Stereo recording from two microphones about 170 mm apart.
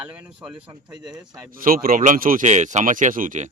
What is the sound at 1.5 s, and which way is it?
Speech, 55° right (ahead or behind).